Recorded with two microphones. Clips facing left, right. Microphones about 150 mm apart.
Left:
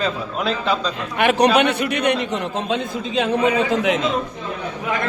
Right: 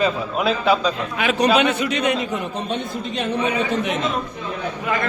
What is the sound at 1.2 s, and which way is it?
Speech, 65° left (ahead or behind).